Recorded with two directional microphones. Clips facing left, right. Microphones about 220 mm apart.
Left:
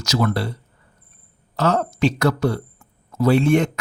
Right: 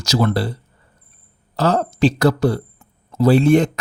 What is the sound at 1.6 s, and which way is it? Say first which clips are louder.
Speech: right 3 dB; 35° right (ahead or behind).